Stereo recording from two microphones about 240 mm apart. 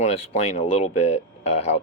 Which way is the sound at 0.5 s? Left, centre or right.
Left.